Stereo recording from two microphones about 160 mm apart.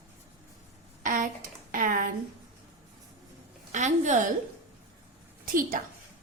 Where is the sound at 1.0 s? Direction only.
55° right (ahead or behind).